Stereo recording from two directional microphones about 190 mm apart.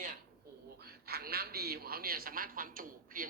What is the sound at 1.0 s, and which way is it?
A man's voice, 55° right (ahead or behind).